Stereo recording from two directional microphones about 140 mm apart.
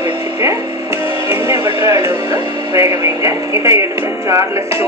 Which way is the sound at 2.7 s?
25° right (ahead or behind).